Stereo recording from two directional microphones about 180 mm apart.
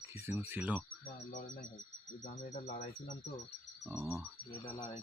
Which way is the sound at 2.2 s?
50° left (ahead or behind).